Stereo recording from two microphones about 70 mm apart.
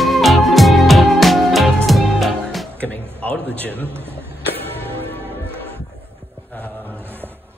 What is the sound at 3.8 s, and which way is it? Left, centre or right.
Speech, right.